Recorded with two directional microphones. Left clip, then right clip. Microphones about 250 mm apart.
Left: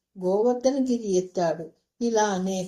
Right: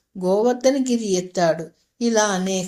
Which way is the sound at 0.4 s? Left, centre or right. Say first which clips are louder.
Right 4 dB; right.